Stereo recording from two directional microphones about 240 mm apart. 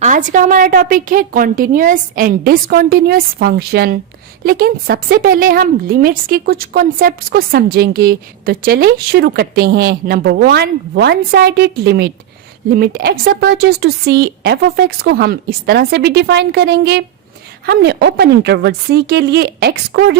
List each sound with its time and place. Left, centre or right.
0.0 s a woman's voice: right